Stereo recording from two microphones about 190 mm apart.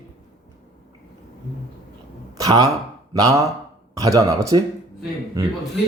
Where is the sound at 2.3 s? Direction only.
20° right (ahead or behind).